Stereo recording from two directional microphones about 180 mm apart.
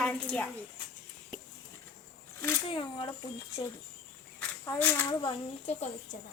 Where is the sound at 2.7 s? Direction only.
30° left (ahead or behind).